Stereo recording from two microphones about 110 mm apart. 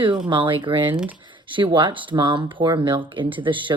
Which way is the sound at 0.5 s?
50° right (ahead or behind).